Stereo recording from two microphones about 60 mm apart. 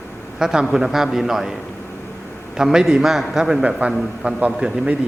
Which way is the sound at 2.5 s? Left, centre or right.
Centre.